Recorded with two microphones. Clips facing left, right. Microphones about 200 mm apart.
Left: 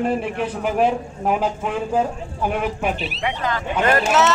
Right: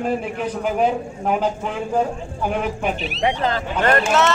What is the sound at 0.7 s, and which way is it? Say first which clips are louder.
Speech: left 2 dB; 5° left (ahead or behind).